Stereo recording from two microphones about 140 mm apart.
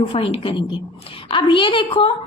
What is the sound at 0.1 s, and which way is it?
A woman's voice, 40° left (ahead or behind).